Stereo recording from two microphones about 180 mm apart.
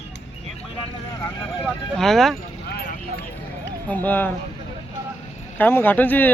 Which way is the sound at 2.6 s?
65° left (ahead or behind).